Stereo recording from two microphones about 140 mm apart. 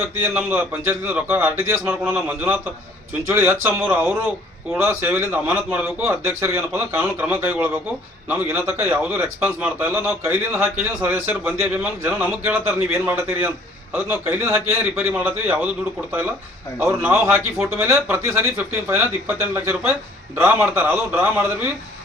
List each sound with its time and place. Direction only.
0.1 s a man's voice: 15° right (ahead or behind)
16.8 s a man's voice: 10° right (ahead or behind)